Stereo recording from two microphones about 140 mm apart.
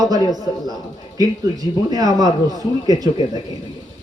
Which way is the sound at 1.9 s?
25° right (ahead or behind).